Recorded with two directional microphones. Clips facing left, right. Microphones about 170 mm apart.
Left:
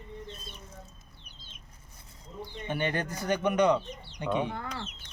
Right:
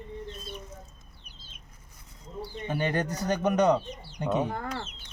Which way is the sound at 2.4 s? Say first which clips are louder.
Right 2 dB; 35° right (ahead or behind).